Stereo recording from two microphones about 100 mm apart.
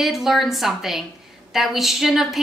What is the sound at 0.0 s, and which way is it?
Speech, centre (ahead or behind).